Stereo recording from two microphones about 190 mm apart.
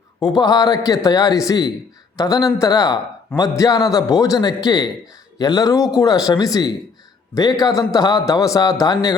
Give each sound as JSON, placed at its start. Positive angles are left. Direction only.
{"t": 0.2, "sound": "a man's voice", "side_deg": 20}